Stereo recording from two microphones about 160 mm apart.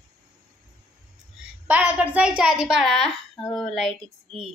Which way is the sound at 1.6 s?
10° right (ahead or behind).